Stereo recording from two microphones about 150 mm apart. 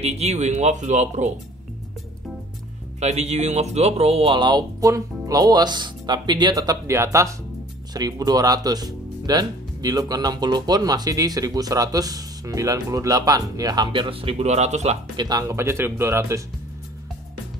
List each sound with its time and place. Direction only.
0.0 s speech: 45° right (ahead or behind)
3.0 s speech: 45° right (ahead or behind)
15.1 s speech: 25° right (ahead or behind)